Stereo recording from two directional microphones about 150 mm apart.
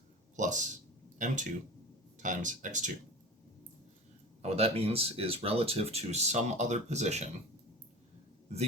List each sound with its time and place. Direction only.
0.3 s speech: 55° right (ahead or behind)
4.4 s speech: 40° right (ahead or behind)